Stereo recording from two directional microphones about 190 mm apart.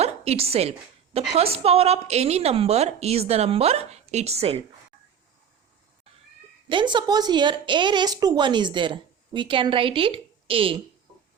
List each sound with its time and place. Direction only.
0.0 s a woman's voice: 35° right (ahead or behind)
6.7 s a woman's voice: 25° right (ahead or behind)